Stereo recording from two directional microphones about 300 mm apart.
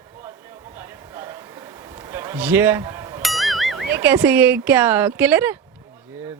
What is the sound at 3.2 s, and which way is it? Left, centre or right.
Speech, centre.